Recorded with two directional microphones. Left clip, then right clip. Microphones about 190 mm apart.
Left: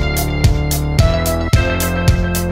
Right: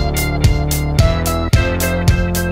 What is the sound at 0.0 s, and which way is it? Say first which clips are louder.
Music: even; centre (ahead or behind).